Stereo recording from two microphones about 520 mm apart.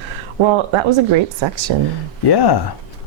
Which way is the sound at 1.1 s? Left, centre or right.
Right.